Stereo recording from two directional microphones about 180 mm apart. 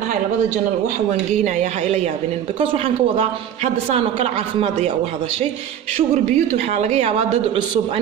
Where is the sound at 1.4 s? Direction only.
40° right (ahead or behind).